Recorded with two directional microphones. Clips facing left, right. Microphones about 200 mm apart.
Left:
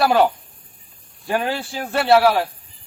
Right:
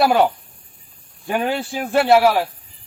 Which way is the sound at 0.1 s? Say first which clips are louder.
Even; 10° right (ahead or behind).